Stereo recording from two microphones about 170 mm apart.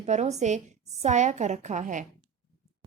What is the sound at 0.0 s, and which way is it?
A woman's voice, 40° right (ahead or behind).